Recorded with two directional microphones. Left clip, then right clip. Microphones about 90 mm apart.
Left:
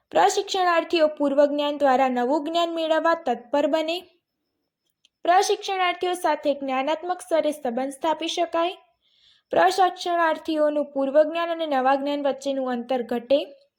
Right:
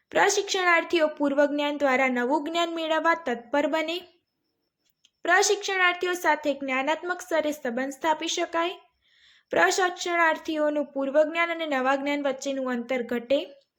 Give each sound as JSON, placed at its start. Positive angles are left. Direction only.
{"t": 0.1, "sound": "speech", "side_deg": 20}
{"t": 5.2, "sound": "speech", "side_deg": 20}